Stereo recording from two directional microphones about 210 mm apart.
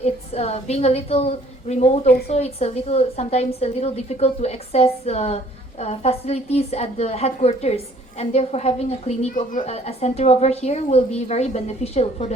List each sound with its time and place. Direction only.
0.0 s a woman's voice: 30° left (ahead or behind)
2.0 s speech: 50° left (ahead or behind)
2.3 s a woman's voice: 30° left (ahead or behind)